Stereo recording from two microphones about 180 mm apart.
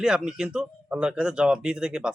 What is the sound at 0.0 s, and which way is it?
Speech, 5° right (ahead or behind).